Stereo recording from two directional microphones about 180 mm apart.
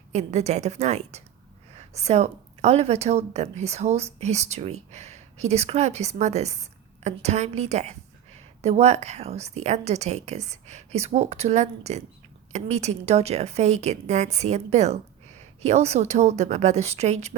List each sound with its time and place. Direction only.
0.1 s a woman's voice: 40° right (ahead or behind)